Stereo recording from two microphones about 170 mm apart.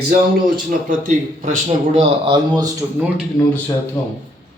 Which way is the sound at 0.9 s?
50° right (ahead or behind).